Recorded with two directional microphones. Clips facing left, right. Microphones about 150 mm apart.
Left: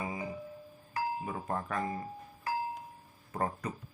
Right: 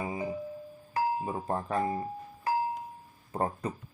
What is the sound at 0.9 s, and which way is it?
Music, 30° right (ahead or behind).